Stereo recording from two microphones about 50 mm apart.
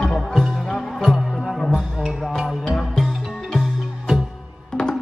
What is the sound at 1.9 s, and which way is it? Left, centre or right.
Music, centre.